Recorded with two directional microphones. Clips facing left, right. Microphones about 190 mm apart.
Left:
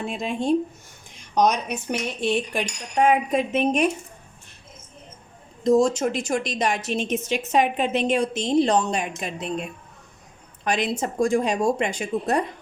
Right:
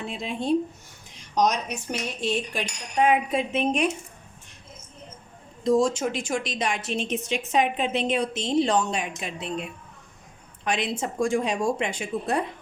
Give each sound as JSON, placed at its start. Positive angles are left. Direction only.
{"t": 0.1, "sound": "speech", "side_deg": 50}
{"t": 5.6, "sound": "speech", "side_deg": 45}